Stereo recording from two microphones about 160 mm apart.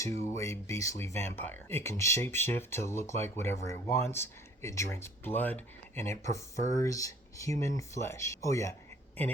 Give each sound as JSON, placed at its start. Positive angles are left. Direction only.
{"t": 0.3, "sound": "speech", "side_deg": 15}